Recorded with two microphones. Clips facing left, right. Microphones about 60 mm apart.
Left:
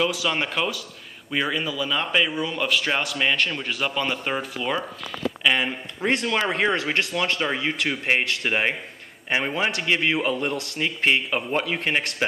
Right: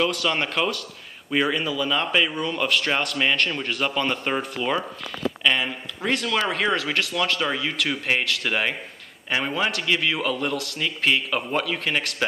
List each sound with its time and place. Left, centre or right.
0.0 s speech: centre
5.4 s speech: centre
6.0 s a man's voice: left